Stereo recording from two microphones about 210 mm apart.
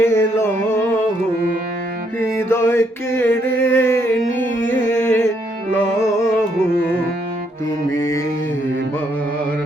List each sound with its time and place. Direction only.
0.0 s carnatic music: 10° left (ahead or behind)
2.5 s a sound: 10° left (ahead or behind)
7.9 s mantra: 70° left (ahead or behind)